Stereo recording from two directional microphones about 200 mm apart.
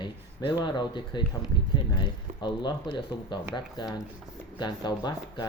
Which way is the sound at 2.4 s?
20° left (ahead or behind).